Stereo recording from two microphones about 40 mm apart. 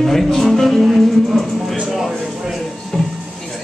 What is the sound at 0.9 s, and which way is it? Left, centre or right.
Music, centre.